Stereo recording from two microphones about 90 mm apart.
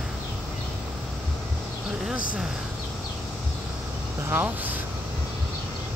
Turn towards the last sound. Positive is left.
turn(degrees=-25)  # may be behind; listen again after turning